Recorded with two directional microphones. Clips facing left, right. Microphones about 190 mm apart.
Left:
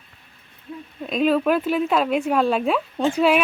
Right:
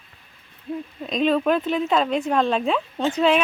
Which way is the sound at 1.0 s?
5° left (ahead or behind).